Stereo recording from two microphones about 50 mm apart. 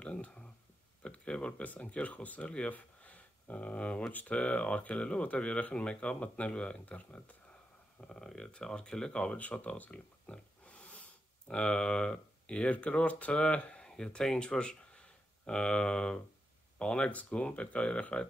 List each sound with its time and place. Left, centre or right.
0.0 s a sound: left
1.0 s speech: left
8.0 s speech: centre